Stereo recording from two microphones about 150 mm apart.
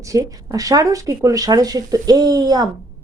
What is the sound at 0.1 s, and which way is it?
A woman's voice, 25° right (ahead or behind).